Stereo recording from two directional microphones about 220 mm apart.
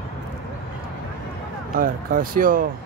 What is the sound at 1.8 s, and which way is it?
Speech, 40° right (ahead or behind).